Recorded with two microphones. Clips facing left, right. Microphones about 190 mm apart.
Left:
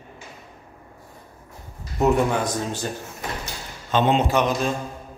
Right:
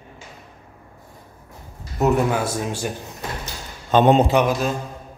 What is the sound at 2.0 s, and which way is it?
Speech, 5° right (ahead or behind).